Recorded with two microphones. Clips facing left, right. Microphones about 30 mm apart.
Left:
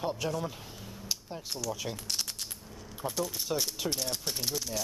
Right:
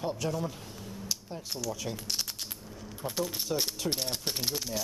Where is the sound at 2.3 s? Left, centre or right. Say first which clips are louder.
Right 1 dB; centre.